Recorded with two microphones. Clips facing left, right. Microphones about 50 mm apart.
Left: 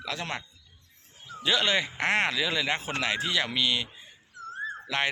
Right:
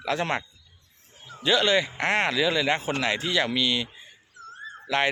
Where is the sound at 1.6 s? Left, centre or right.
Centre.